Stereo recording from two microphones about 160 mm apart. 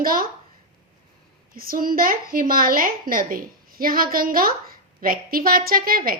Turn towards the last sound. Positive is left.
turn(degrees=-65)  # may be behind; listen again after turning